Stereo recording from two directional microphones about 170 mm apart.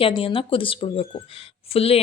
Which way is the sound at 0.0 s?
30° left (ahead or behind).